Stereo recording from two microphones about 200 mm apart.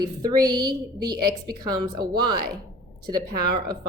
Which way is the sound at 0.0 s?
20° right (ahead or behind).